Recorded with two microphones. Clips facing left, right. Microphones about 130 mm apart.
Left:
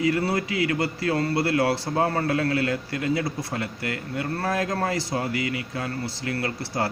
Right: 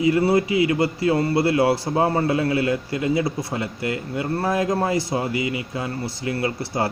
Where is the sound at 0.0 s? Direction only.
20° right (ahead or behind).